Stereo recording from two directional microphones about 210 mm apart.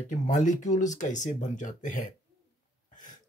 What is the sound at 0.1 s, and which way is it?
Speech, 35° left (ahead or behind).